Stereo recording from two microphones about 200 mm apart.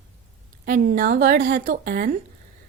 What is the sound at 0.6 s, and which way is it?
A woman's voice, 45° right (ahead or behind).